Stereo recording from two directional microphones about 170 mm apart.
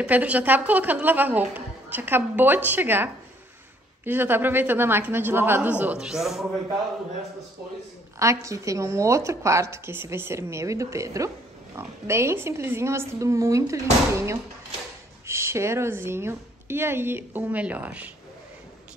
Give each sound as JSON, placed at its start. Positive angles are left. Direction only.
{"t": 0.0, "sound": "a woman's voice", "side_deg": -10}
{"t": 8.2, "sound": "a woman's voice", "side_deg": -20}